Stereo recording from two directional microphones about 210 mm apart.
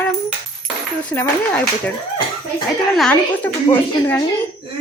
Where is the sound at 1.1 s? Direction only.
10° left (ahead or behind).